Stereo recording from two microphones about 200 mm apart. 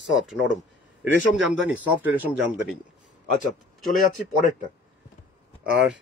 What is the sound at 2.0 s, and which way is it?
Speech, 10° right (ahead or behind).